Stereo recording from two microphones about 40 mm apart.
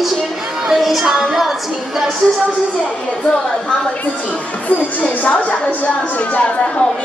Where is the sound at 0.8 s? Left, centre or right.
Centre.